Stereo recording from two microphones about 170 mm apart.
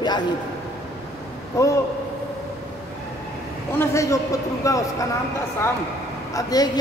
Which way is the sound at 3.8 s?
15° left (ahead or behind).